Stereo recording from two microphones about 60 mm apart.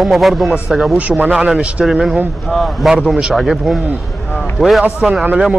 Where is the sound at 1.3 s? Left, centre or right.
Centre.